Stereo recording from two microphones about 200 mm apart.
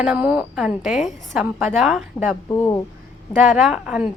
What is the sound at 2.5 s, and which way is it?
Speech, 15° left (ahead or behind).